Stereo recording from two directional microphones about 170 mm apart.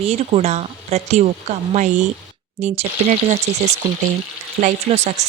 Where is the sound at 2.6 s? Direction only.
40° right (ahead or behind).